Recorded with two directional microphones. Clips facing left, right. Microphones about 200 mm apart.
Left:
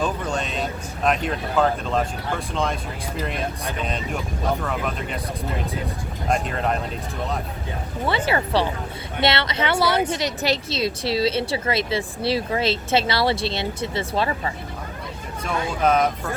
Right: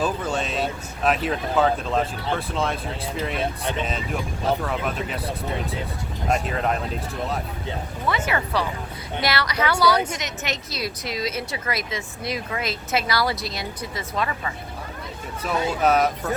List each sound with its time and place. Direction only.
0.0 s speech: 5° right (ahead or behind)
6.2 s speech: 5° right (ahead or behind)
8.0 s a woman's voice: 30° left (ahead or behind)
15.8 s speech: 5° right (ahead or behind)